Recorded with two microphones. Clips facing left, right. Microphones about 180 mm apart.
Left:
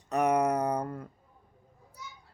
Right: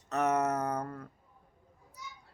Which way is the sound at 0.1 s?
15° left (ahead or behind).